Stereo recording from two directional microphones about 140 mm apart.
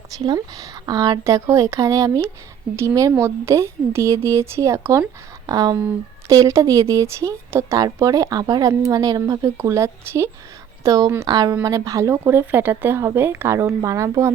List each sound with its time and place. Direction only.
0.3 s a woman's voice: 25° right (ahead or behind)